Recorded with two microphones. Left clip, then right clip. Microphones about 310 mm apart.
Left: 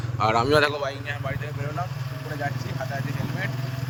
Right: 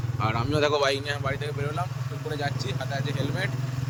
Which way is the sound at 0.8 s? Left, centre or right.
Right.